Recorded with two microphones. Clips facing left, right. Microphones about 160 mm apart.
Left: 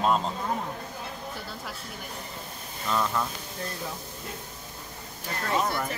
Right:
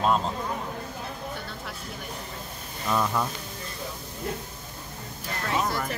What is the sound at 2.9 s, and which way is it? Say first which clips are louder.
Speech: right 2 dB; 10° right (ahead or behind).